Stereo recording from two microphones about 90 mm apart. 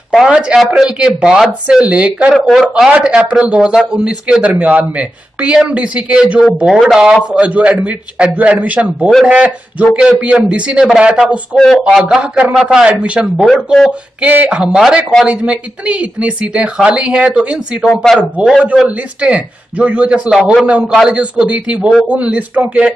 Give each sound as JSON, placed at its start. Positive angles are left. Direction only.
{"t": 0.1, "sound": "a man's voice", "side_deg": -5}
{"t": 11.5, "sound": "speech", "side_deg": 5}
{"t": 11.9, "sound": "a man's voice", "side_deg": -5}